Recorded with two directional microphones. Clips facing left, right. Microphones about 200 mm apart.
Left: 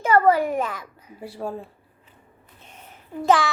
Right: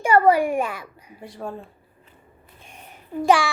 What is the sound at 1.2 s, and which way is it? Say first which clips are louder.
Speech: left 2 dB; 5° left (ahead or behind).